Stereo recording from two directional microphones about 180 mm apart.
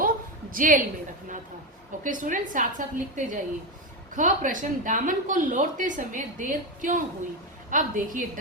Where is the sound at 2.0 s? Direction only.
45° right (ahead or behind).